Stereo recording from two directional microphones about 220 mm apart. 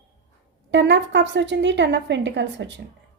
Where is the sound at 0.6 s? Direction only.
55° right (ahead or behind).